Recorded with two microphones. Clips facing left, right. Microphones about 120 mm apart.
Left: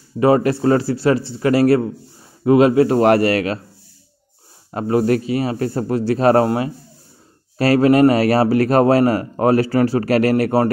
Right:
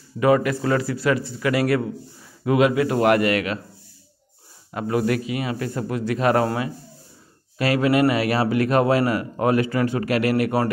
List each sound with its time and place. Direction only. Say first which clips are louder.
0.2 s a man's voice: left 4 dB; 30° left (ahead or behind)
4.6 s a man's voice: left 5 dB; 35° left (ahead or behind)